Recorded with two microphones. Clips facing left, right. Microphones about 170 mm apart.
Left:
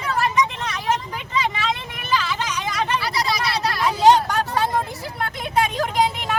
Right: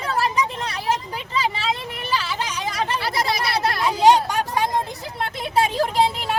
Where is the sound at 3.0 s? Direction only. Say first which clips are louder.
Even; 55° right (ahead or behind).